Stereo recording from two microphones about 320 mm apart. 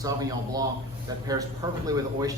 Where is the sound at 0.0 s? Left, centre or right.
Centre.